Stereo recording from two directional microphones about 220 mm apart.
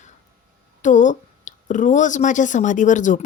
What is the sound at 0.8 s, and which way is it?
A woman's voice, 35° left (ahead or behind).